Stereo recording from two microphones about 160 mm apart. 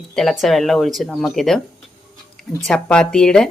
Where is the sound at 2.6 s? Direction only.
5° left (ahead or behind).